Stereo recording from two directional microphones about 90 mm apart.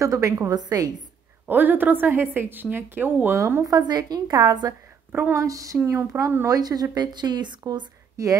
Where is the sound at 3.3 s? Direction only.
30° right (ahead or behind).